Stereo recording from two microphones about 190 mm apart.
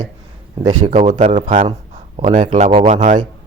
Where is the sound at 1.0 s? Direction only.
40° right (ahead or behind).